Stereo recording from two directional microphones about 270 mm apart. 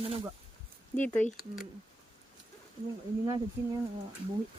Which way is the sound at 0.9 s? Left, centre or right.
Centre.